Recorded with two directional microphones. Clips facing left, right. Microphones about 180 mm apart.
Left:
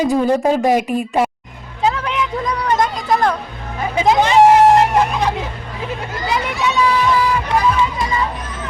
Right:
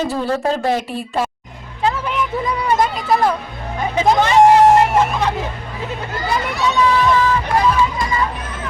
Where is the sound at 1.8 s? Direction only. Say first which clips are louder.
Left 1 dB; 5° right (ahead or behind).